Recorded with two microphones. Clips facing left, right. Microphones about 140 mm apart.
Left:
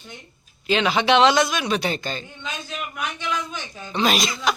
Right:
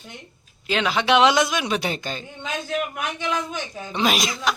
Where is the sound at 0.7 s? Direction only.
Centre (ahead or behind).